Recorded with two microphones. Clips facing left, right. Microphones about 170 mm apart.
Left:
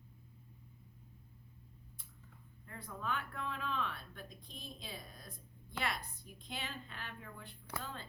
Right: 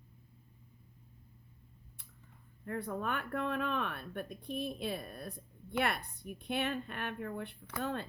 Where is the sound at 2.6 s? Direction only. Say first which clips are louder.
Right 9 dB; 60° right (ahead or behind).